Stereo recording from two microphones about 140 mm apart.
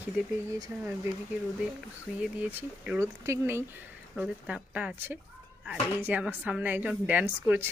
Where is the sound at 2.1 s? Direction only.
Centre (ahead or behind).